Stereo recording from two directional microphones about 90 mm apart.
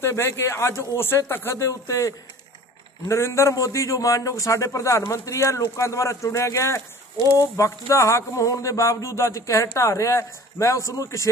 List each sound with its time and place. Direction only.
0.0 s a man's voice: 30° left (ahead or behind)